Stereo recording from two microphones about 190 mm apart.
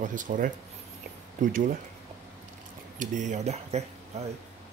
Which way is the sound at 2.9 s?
40° right (ahead or behind).